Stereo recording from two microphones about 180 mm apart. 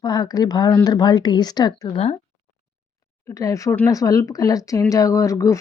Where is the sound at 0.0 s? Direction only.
20° left (ahead or behind).